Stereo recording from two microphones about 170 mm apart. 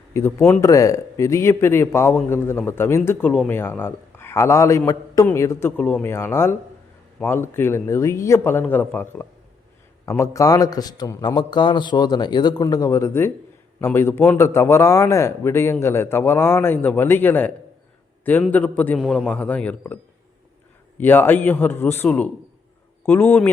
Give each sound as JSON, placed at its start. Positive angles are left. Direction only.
{"t": 0.1, "sound": "a man's voice", "side_deg": 15}
{"t": 21.0, "sound": "speech", "side_deg": 10}